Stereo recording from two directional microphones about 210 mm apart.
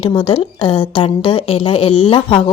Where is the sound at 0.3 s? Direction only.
25° left (ahead or behind).